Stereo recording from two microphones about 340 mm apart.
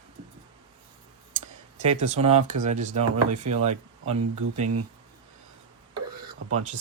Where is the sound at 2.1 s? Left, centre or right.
Right.